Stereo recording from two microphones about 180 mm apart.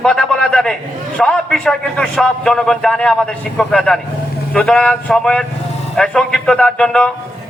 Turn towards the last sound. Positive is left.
turn(degrees=5)  # may be behind; listen again after turning